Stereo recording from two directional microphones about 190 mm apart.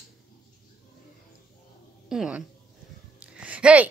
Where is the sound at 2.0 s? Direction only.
5° right (ahead or behind).